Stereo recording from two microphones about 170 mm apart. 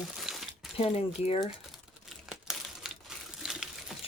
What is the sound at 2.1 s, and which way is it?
Crumpling, centre (ahead or behind).